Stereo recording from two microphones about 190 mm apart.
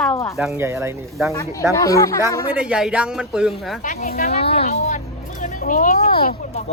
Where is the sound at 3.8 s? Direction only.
40° left (ahead or behind).